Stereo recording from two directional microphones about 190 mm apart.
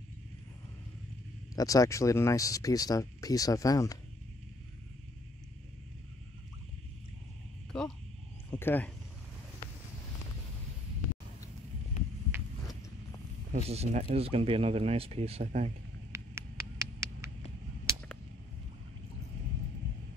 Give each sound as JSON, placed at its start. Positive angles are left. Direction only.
{"t": 1.5, "sound": "speech", "side_deg": 20}
{"t": 7.7, "sound": "wild animals", "side_deg": 5}
{"t": 13.5, "sound": "speech", "side_deg": -35}
{"t": 16.1, "sound": "a sound", "side_deg": -15}